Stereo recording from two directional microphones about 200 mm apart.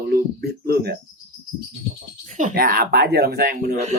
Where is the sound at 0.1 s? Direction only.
50° right (ahead or behind).